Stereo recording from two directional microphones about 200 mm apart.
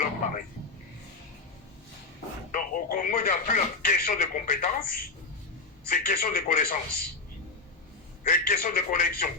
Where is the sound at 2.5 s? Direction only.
45° left (ahead or behind).